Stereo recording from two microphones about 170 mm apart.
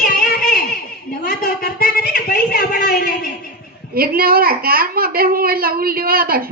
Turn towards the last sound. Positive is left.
turn(degrees=-60)  # may be behind; listen again after turning